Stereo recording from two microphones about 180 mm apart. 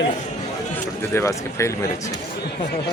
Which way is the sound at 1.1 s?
15° left (ahead or behind).